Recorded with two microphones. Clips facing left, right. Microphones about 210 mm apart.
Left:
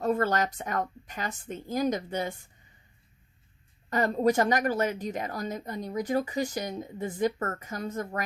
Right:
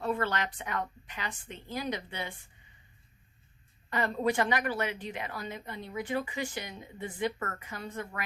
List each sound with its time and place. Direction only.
0.0 s a woman's voice: 40° left (ahead or behind)
3.8 s a woman's voice: 40° left (ahead or behind)